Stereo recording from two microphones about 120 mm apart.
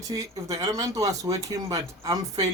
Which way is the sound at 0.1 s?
30° right (ahead or behind).